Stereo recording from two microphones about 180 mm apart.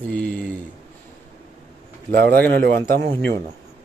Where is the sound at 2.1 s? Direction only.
60° right (ahead or behind).